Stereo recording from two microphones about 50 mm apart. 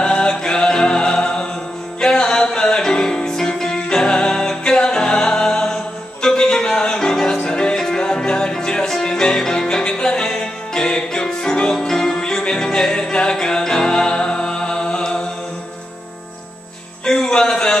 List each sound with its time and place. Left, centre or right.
0.0 s music: centre
17.0 s music: centre